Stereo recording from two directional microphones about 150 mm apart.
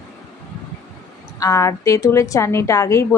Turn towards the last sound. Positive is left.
turn(degrees=20)  # may be behind; listen again after turning